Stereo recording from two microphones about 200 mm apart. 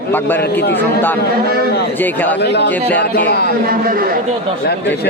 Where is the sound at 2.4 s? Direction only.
55° left (ahead or behind).